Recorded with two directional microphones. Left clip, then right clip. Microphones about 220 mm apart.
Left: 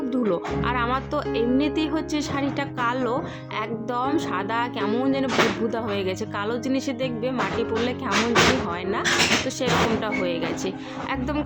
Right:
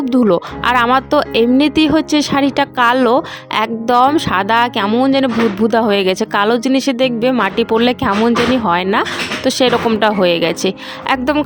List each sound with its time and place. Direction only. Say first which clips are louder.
0.1 s speech: right 12 dB; 45° right (ahead or behind)